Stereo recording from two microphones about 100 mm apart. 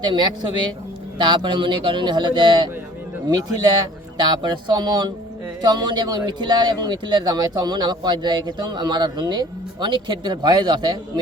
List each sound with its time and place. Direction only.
0.0 s speech: 50° right (ahead or behind)